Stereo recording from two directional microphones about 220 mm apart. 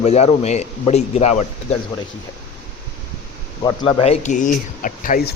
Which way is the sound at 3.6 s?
25° left (ahead or behind).